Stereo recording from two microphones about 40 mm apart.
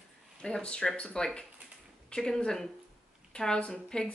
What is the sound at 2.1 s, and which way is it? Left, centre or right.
A woman's voice, centre.